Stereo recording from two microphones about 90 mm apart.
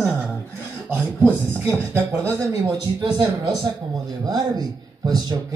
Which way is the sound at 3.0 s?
60° right (ahead or behind).